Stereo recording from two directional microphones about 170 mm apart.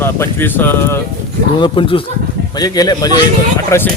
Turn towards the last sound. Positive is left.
turn(degrees=15)  # may be behind; listen again after turning